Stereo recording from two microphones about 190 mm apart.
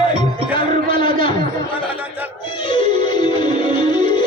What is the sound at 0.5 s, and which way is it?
Speech, 25° left (ahead or behind).